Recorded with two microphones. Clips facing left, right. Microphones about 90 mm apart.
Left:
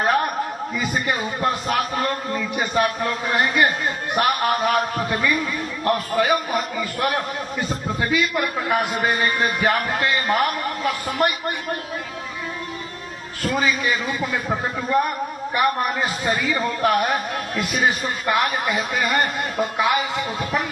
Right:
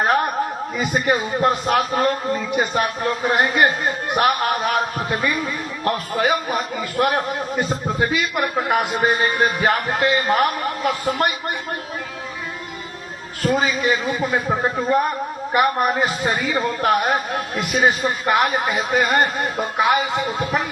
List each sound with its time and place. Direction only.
1.0 s a man's voice: 35° right (ahead or behind)
13.4 s a man's voice: 40° right (ahead or behind)
16.6 s a man's voice: 25° right (ahead or behind)